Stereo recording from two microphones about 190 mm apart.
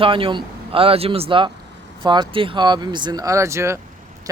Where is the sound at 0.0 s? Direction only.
25° right (ahead or behind).